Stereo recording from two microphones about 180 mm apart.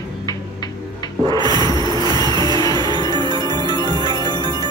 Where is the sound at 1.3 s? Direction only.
25° right (ahead or behind).